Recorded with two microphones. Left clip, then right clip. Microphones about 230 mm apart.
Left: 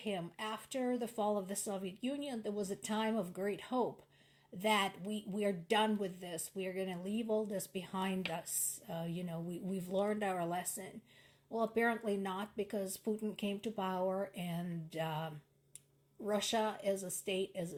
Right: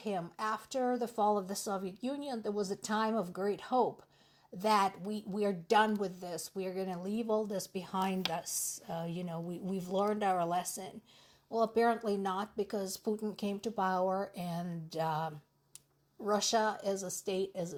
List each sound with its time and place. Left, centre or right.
0.0 s speech: right
16.3 s speech: right